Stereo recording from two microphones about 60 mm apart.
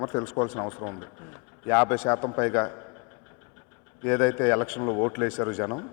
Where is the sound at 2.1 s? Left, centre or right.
Left.